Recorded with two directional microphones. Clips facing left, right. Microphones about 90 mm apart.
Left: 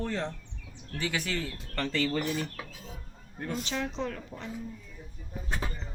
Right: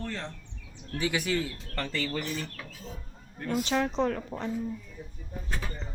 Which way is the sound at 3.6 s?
45° right (ahead or behind).